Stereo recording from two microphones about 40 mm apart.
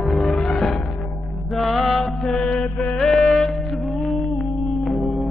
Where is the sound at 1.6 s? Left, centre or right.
Centre.